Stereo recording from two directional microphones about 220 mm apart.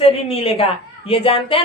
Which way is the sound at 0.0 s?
25° left (ahead or behind).